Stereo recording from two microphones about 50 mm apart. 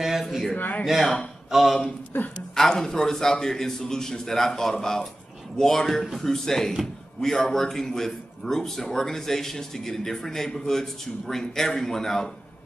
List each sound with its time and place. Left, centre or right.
0.0 s a sound: centre
0.6 s a man's voice: left
1.5 s speech: centre
2.1 s a man's voice: left
2.5 s a man's voice: centre